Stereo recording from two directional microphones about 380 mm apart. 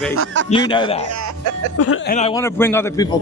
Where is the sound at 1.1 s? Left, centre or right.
Right.